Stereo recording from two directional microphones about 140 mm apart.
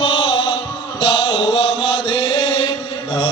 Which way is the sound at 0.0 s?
35° left (ahead or behind).